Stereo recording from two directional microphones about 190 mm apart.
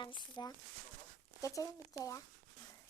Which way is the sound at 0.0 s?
25° left (ahead or behind).